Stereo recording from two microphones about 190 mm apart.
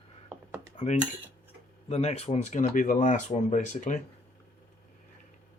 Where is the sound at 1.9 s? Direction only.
35° left (ahead or behind).